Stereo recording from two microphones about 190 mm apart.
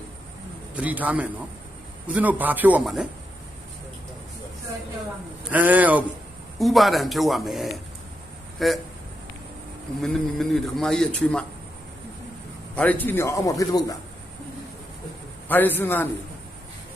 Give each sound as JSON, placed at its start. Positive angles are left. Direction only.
{"t": 0.8, "sound": "a man's voice", "side_deg": -10}
{"t": 5.5, "sound": "a man's voice", "side_deg": -10}
{"t": 10.0, "sound": "a man's voice", "side_deg": 0}
{"t": 12.7, "sound": "a man's voice", "side_deg": 10}
{"t": 15.4, "sound": "a man's voice", "side_deg": 10}